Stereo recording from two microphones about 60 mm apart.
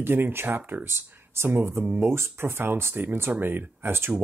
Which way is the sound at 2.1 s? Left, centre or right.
Right.